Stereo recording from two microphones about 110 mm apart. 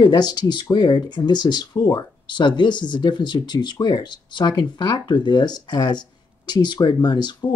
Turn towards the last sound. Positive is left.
turn(degrees=40)  # may be behind; listen again after turning